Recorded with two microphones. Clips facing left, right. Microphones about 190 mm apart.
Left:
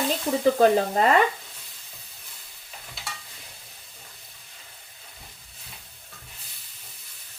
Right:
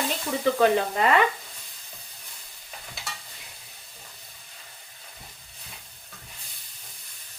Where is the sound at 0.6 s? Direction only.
40° left (ahead or behind).